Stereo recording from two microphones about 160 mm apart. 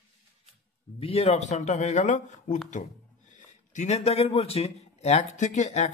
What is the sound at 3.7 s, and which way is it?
Speech, 45° left (ahead or behind).